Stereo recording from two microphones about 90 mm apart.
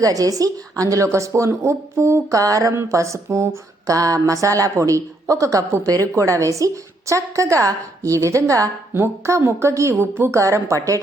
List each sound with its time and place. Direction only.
0.0 s speech: 40° right (ahead or behind)